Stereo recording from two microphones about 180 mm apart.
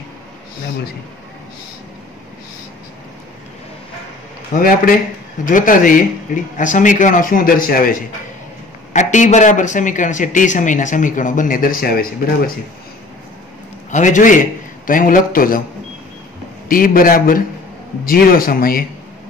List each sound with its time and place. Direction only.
4.6 s speech: 50° left (ahead or behind)
13.8 s speech: 45° left (ahead or behind)
16.6 s speech: 50° left (ahead or behind)